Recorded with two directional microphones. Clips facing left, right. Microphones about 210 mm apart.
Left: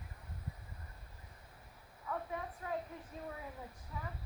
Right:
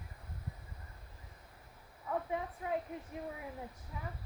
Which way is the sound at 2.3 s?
20° right (ahead or behind).